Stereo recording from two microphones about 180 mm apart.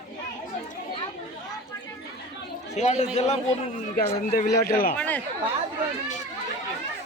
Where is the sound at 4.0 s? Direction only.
55° left (ahead or behind).